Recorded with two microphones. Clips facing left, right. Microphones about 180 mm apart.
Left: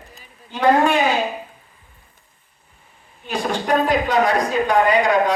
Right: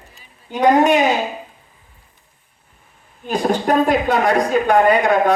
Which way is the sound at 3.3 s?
45° right (ahead or behind).